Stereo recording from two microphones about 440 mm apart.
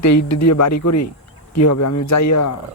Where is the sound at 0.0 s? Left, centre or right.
Left.